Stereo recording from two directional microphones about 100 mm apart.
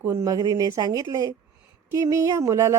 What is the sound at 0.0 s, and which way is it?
A woman's voice, 40° right (ahead or behind).